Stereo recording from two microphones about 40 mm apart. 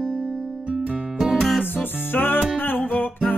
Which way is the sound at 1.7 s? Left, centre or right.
Left.